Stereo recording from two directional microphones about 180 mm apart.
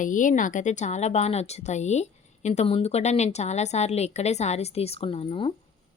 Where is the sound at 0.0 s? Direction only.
45° left (ahead or behind); by 5.5 s 30° left (ahead or behind).